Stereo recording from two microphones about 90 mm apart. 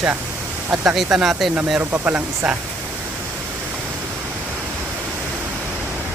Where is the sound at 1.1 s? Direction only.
5° right (ahead or behind).